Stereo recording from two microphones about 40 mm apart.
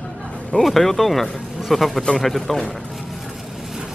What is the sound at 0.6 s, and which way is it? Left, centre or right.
Speech, centre.